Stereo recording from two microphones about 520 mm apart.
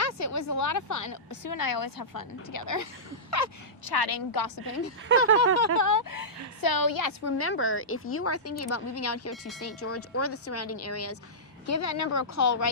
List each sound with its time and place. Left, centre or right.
0.0 s a woman's voice: left
3.9 s a woman's voice: left